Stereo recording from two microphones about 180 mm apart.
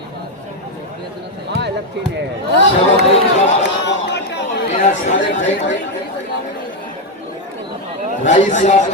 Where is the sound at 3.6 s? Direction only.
75° left (ahead or behind).